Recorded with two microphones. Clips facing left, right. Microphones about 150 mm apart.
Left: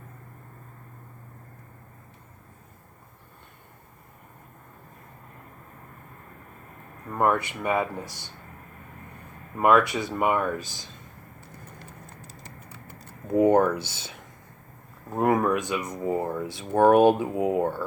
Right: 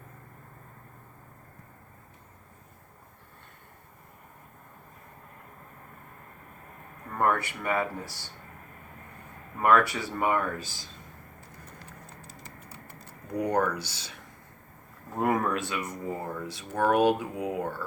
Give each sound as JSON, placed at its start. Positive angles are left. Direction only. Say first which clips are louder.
{"t": 7.2, "sound": "speech", "louder": "left 3 dB", "side_deg": 15}
{"t": 9.6, "sound": "speech", "louder": "left 3 dB", "side_deg": 15}
{"t": 13.2, "sound": "speech", "louder": "left 8 dB", "side_deg": 25}
{"t": 15.2, "sound": "speech", "louder": "left 4 dB", "side_deg": 15}